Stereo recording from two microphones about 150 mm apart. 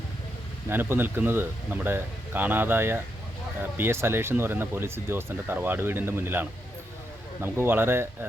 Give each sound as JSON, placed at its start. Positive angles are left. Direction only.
{"t": 0.7, "sound": "speech", "side_deg": -15}